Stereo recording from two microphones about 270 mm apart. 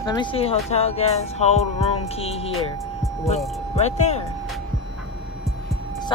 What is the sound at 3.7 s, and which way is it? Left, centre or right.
Speech, left.